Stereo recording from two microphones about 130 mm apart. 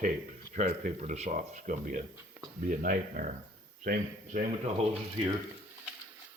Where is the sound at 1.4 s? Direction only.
80° right.